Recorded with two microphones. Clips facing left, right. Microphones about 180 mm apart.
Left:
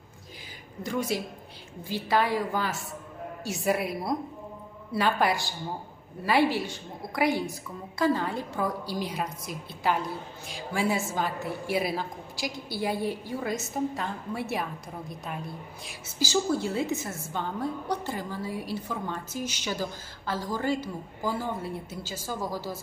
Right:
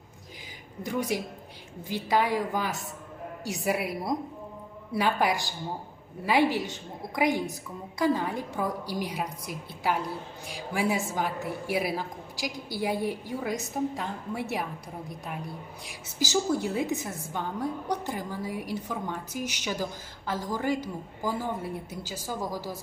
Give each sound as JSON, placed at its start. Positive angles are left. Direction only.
{"t": 0.8, "sound": "a woman's voice", "side_deg": -15}
{"t": 15.9, "sound": "a woman's voice", "side_deg": -15}